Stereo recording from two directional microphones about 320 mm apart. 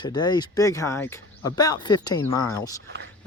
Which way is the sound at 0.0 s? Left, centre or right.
Centre.